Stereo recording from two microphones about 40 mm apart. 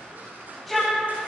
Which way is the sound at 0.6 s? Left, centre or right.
Centre.